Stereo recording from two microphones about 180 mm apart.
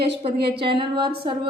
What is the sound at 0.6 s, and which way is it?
Speech, 30° right (ahead or behind).